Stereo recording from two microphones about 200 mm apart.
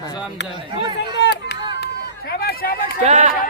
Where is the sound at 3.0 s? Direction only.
35° right (ahead or behind).